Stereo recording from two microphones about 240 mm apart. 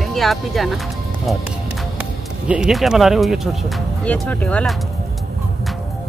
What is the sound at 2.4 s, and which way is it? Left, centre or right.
Speech, centre.